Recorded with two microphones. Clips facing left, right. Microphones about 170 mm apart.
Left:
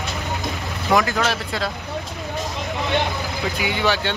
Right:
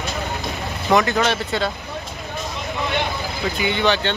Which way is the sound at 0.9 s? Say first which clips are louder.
Right 2 dB; centre (ahead or behind).